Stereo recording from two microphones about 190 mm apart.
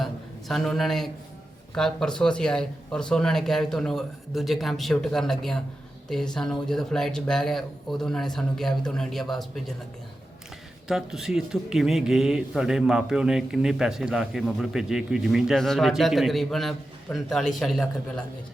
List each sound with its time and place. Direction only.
0.0 s a sound: centre (ahead or behind)
1.7 s a man's voice: 5° left (ahead or behind)
10.8 s a man's voice: centre (ahead or behind)